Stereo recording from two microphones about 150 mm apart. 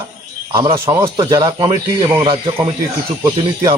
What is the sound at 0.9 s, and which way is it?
Speech, 25° right (ahead or behind).